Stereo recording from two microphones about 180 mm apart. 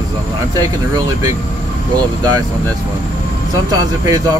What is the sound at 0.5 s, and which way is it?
Speech, 20° right (ahead or behind).